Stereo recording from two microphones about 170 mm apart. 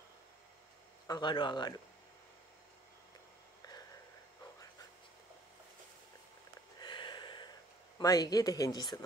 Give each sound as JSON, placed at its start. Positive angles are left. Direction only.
{"t": 1.0, "sound": "speech", "side_deg": 25}
{"t": 6.8, "sound": "a sound", "side_deg": 25}
{"t": 8.0, "sound": "speech", "side_deg": 20}